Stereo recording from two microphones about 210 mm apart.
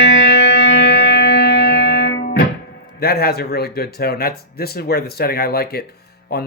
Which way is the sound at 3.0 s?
50° left (ahead or behind).